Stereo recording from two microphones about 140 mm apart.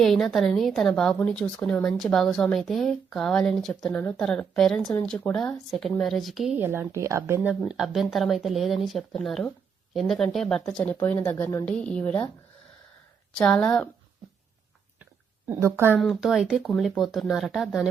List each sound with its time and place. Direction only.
0.0 s a woman's voice: centre (ahead or behind)
6.6 s speech: 15° right (ahead or behind)
7.7 s a woman's voice: centre (ahead or behind)
13.4 s a woman's voice: 5° left (ahead or behind)
15.4 s speech: 15° right (ahead or behind)
16.0 s a woman's voice: centre (ahead or behind)